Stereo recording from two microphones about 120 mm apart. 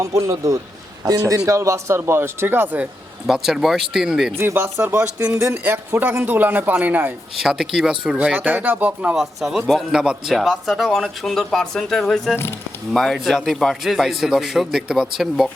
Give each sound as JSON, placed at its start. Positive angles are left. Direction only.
{"t": 0.0, "sound": "speech", "side_deg": -25}
{"t": 3.2, "sound": "speech", "side_deg": -5}
{"t": 4.4, "sound": "speech", "side_deg": -20}
{"t": 5.7, "sound": "a man's voice", "side_deg": -15}
{"t": 7.3, "sound": "speech", "side_deg": -5}